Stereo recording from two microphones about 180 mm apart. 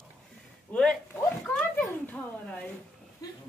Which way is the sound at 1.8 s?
10° left (ahead or behind).